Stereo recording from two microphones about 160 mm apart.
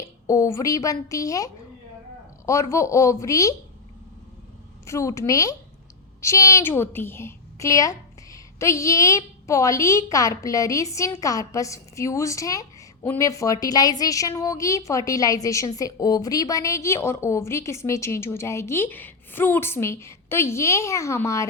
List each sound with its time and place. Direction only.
0.0 s a woman's voice: 20° left (ahead or behind)
2.5 s a woman's voice: 20° left (ahead or behind)
4.9 s a woman's voice: 20° left (ahead or behind)